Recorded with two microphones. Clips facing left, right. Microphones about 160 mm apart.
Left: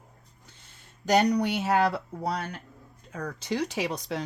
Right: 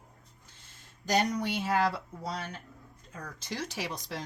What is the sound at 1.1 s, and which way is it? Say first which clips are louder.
Speech: left 6 dB; 65° left (ahead or behind).